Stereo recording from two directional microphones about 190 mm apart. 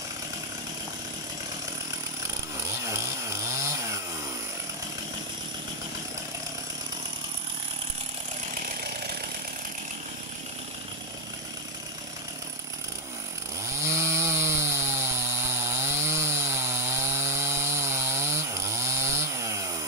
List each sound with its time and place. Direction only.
2.8 s chainsaw: 15° right (ahead or behind)
13.8 s chainsaw: 15° right (ahead or behind)